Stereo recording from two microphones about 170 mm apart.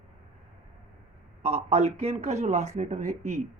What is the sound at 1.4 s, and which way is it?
Speech, 40° right (ahead or behind).